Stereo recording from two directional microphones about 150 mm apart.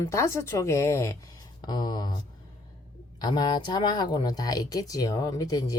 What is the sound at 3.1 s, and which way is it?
Speech, 30° left (ahead or behind).